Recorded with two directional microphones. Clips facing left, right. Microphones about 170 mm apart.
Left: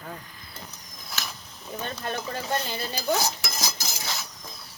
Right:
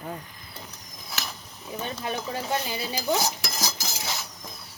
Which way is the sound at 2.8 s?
15° right (ahead or behind).